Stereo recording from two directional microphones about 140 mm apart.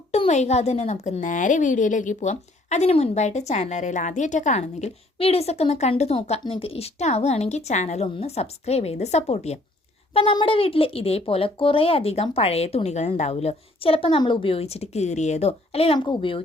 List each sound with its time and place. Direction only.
0.1 s a woman's voice: 50° left (ahead or behind)